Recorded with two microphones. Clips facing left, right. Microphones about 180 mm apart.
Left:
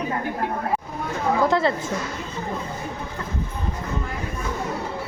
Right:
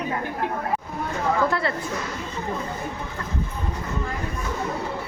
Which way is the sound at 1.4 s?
20° left (ahead or behind).